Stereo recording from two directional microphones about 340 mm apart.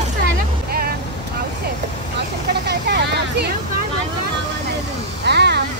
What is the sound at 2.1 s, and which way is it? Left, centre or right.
Speech, right.